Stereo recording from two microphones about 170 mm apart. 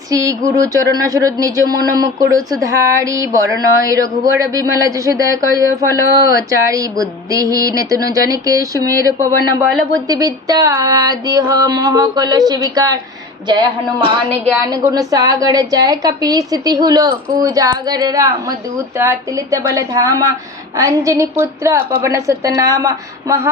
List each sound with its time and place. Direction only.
0.1 s a woman's voice: 20° right (ahead or behind)